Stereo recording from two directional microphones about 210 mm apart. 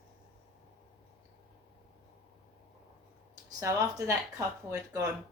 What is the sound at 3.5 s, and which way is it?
Speech, 15° right (ahead or behind).